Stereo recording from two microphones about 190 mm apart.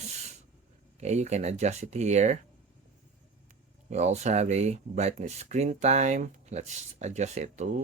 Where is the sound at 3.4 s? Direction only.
35° right (ahead or behind).